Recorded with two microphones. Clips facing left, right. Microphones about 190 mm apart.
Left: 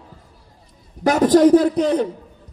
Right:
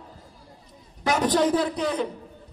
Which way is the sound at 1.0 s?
45° left (ahead or behind).